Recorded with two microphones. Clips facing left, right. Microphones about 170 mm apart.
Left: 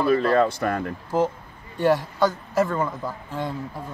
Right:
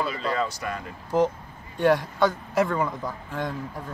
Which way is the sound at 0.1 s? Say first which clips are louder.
Left 9 dB; 55° left (ahead or behind).